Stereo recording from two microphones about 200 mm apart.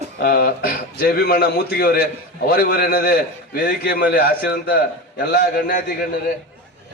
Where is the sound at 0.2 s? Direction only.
45° left (ahead or behind).